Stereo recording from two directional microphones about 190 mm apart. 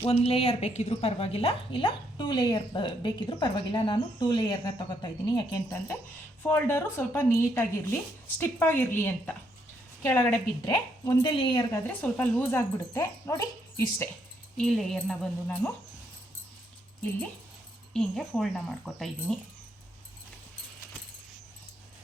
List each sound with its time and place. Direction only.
0.1 s a woman's voice: 30° left (ahead or behind); by 10.8 s 10° left (ahead or behind)
11.0 s a woman's voice: 25° left (ahead or behind)
11.7 s speech: 10° left (ahead or behind)
14.6 s speech: centre (ahead or behind)
17.9 s speech: centre (ahead or behind)